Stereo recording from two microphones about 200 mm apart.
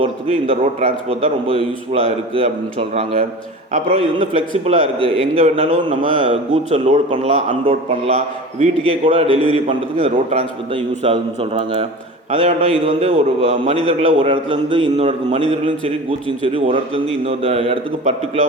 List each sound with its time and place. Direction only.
0.0 s a man's voice: 30° right (ahead or behind)
5.4 s a man's voice: 40° right (ahead or behind)